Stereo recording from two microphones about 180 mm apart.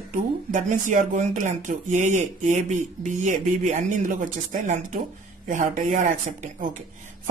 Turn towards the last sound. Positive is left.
turn(degrees=-45)  # may be behind; listen again after turning